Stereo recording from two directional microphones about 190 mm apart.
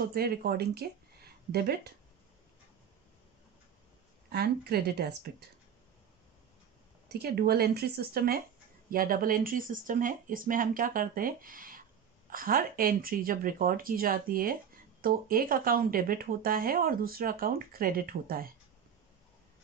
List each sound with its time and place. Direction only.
0.0 s speech: 55° right (ahead or behind)
4.3 s speech: 55° right (ahead or behind)
7.1 s speech: 55° right (ahead or behind)